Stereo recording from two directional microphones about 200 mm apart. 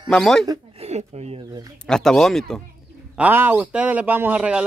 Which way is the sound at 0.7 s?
30° right (ahead or behind).